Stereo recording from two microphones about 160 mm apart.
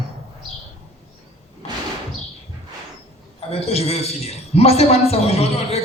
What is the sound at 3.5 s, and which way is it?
A man's voice, 40° left (ahead or behind).